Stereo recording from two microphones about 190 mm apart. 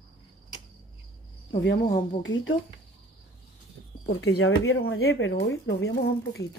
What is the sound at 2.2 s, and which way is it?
Speech, 90° left.